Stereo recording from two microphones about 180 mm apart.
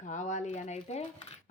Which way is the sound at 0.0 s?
45° left (ahead or behind).